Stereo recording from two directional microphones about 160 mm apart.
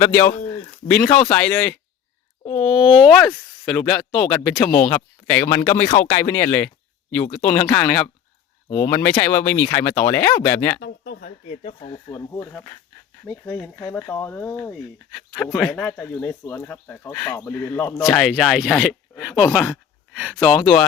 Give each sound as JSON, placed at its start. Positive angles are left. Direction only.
{"t": 0.0, "sound": "speech", "side_deg": 15}
{"t": 10.8, "sound": "speech", "side_deg": 75}
{"t": 11.4, "sound": "speech", "side_deg": 40}
{"t": 12.0, "sound": "speech", "side_deg": 20}
{"t": 18.0, "sound": "speech", "side_deg": 0}